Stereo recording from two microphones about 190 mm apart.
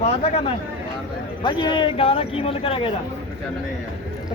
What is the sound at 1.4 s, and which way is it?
A man's voice, 25° left (ahead or behind).